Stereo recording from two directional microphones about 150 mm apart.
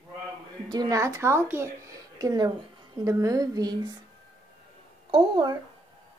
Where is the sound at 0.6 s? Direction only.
25° right (ahead or behind).